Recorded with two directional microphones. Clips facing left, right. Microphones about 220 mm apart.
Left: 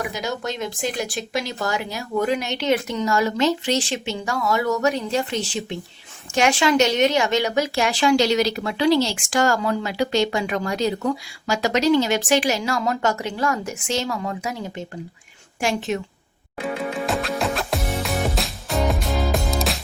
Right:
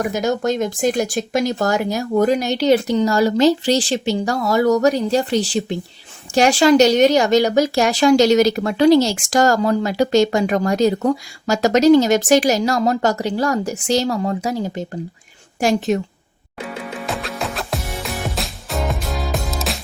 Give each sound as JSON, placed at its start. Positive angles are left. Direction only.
{"t": 0.0, "sound": "speech", "side_deg": -45}
{"t": 17.1, "sound": "music", "side_deg": 0}